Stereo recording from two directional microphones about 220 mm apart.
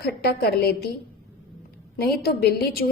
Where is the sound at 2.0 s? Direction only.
45° left (ahead or behind).